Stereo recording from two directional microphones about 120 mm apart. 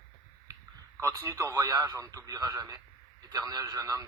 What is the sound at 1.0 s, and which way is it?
A man's voice, 25° right (ahead or behind).